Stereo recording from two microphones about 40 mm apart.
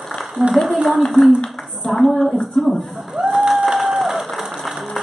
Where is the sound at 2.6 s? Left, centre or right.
Centre.